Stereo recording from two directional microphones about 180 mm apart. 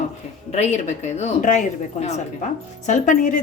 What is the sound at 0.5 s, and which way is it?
A woman's voice, 40° left (ahead or behind).